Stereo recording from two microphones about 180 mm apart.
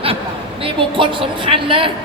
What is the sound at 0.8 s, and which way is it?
Speech, 30° right (ahead or behind).